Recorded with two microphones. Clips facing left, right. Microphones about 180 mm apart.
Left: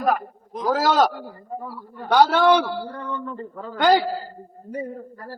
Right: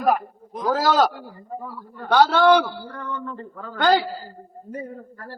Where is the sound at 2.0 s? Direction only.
15° left (ahead or behind).